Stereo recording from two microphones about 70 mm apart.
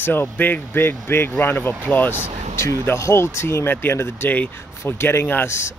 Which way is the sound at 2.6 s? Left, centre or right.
Left.